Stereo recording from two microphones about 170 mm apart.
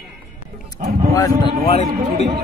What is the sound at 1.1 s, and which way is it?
Speech, 20° left (ahead or behind).